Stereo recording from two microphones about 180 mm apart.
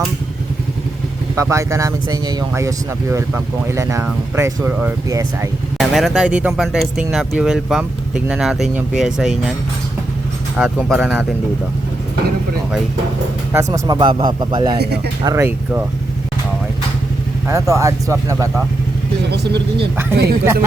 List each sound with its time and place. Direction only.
1.4 s speech: 15° right (ahead or behind)
5.9 s speech: centre (ahead or behind)
10.6 s speech: 5° left (ahead or behind)
13.5 s speech: 15° right (ahead or behind)
14.8 s speech: 65° right (ahead or behind)
15.2 s speech: 15° right (ahead or behind)
17.5 s speech: 15° right (ahead or behind)
20.4 s speech: 15° right (ahead or behind)